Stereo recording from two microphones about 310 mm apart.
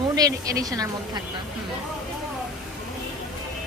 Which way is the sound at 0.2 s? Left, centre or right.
Centre.